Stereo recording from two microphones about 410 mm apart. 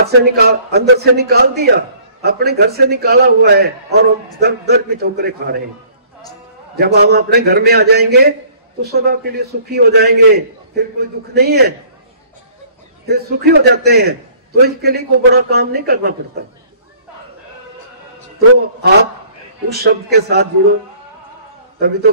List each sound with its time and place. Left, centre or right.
0.0 s a man's voice: right
6.8 s a man's voice: right
13.0 s a man's voice: right
19.7 s a man's voice: right
21.7 s a man's voice: right